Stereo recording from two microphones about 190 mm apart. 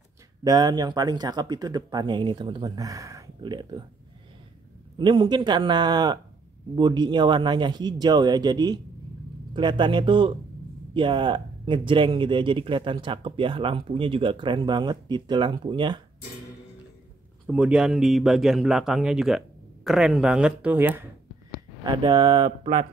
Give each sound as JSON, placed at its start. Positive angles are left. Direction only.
{"t": 0.4, "sound": "speech", "side_deg": -20}
{"t": 4.9, "sound": "speech", "side_deg": -25}
{"t": 17.5, "sound": "speech", "side_deg": -5}
{"t": 21.8, "sound": "speech", "side_deg": -20}